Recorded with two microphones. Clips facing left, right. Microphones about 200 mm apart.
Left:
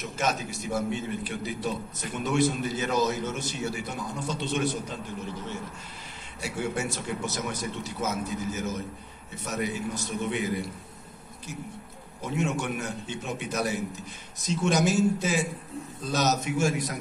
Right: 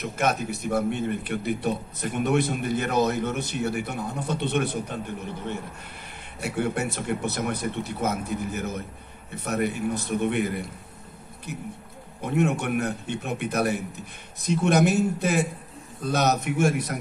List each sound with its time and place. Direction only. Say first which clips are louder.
0.0 s a man's voice: right 4 dB; 60° right (ahead or behind)
12.2 s a man's voice: right 5 dB; 60° right (ahead or behind)